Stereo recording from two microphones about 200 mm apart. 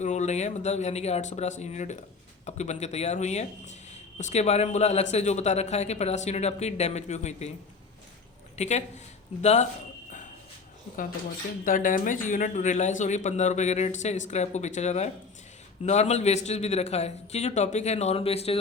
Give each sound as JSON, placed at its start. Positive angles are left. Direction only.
{"t": 0.0, "sound": "speech", "side_deg": 35}
{"t": 8.5, "sound": "speech", "side_deg": 35}
{"t": 11.6, "sound": "speech", "side_deg": 45}